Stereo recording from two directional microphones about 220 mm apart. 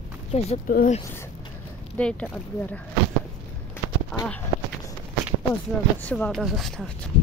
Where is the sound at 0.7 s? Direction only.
40° left (ahead or behind).